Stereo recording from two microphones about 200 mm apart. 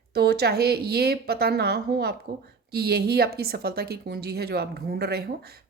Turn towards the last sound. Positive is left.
turn(degrees=-50)  # may be behind; listen again after turning